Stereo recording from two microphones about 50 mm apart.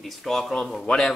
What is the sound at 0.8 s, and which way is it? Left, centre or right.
Speech, centre.